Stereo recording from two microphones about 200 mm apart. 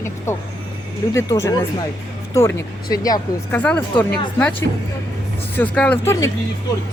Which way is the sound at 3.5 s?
5° left (ahead or behind).